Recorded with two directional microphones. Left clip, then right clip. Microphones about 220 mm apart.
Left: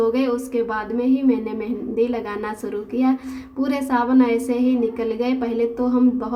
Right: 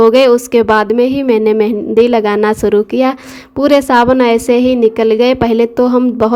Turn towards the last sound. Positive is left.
turn(degrees=-40)  # may be behind; listen again after turning